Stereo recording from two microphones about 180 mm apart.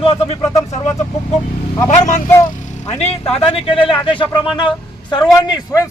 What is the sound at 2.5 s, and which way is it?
A man's voice, 45° left (ahead or behind).